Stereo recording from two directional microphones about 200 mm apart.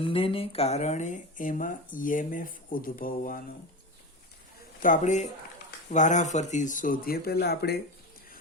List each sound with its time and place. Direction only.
0.0 s speech: 25° left (ahead or behind); by 3.4 s 45° left (ahead or behind)
4.8 s speech: 40° left (ahead or behind)